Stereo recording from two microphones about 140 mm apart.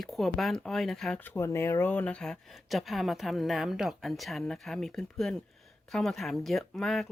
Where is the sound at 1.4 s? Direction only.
20° left (ahead or behind).